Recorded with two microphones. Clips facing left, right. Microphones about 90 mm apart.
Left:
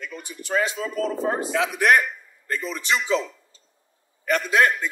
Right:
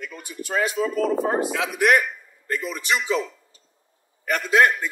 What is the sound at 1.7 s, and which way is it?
A man's voice, 5° right (ahead or behind).